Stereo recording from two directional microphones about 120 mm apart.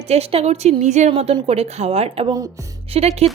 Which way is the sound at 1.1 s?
50° right (ahead or behind).